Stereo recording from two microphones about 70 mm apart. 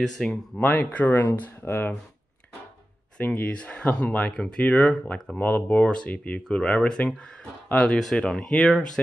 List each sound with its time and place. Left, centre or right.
0.3 s speech: left
3.2 s speech: centre
5.4 s speech: centre